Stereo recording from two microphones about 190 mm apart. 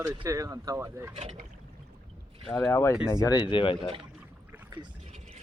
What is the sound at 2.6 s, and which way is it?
Speech, 15° left (ahead or behind).